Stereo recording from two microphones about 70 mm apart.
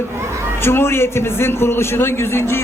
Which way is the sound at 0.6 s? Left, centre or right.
Left.